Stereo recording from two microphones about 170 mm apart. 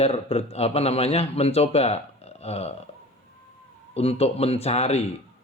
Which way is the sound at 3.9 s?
35° left (ahead or behind).